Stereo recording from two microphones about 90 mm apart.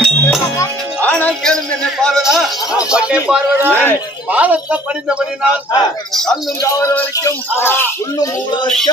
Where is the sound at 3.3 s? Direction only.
20° right (ahead or behind).